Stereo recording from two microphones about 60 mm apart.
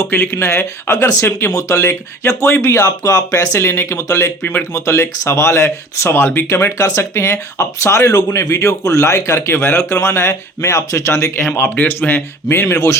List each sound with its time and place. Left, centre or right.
0.0 s speech: left
2.6 s speech: left
3.6 s speech: left
3.9 s speech: left
6.1 s speech: left
6.5 s speech: left
7.0 s speech: left
11.8 s speech: left
12.7 s speech: left